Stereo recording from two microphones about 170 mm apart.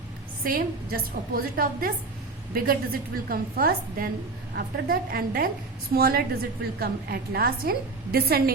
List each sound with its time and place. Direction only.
0.4 s a woman's voice: 60° right (ahead or behind)